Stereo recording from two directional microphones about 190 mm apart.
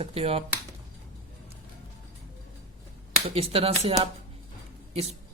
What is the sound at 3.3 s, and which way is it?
Speech, 30° right (ahead or behind).